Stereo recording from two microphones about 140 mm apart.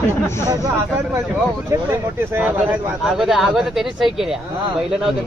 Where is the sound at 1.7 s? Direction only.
15° right (ahead or behind).